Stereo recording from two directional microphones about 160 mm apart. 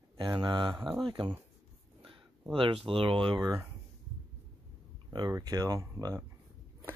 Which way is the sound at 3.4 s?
20° right (ahead or behind).